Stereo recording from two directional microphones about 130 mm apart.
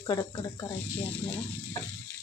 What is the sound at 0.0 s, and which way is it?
Speech, 30° left (ahead or behind).